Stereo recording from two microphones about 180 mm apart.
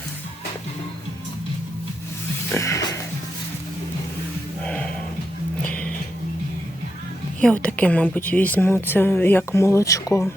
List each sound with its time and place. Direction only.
2.5 s music: 15° left (ahead or behind)
4.6 s a sound: 5° left (ahead or behind)
5.6 s music: 5° left (ahead or behind)
7.4 s a woman's voice: 5° left (ahead or behind)